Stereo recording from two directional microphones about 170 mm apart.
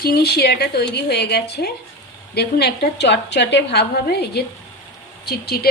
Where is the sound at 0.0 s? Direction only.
70° left (ahead or behind).